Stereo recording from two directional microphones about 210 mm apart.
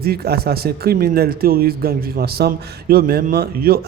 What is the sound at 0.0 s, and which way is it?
Speech, 45° right (ahead or behind).